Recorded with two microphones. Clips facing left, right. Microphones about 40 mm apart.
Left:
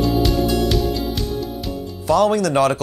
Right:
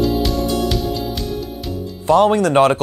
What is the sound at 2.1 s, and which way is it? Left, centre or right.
Speech, right.